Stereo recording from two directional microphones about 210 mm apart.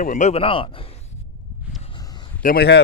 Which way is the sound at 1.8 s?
20° left (ahead or behind).